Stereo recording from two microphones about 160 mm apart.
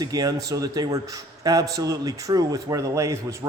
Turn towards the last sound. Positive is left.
turn(degrees=-20)  # may be behind; listen again after turning